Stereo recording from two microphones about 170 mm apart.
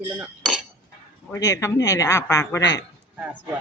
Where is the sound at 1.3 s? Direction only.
20° left (ahead or behind).